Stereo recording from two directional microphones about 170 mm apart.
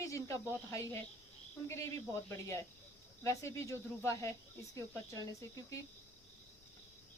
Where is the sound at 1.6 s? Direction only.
15° left (ahead or behind).